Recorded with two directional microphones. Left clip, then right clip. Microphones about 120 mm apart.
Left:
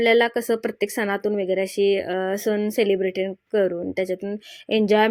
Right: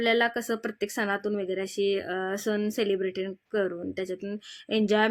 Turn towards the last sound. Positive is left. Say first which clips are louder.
# left 6 dB
turn(degrees=25)  # may be behind; listen again after turning